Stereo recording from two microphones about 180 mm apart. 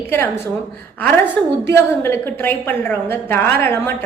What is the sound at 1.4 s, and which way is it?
A woman's voice, 5° left (ahead or behind).